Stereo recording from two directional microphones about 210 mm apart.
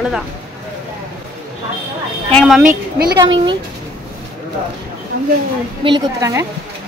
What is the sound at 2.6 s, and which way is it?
Speech, 45° right (ahead or behind).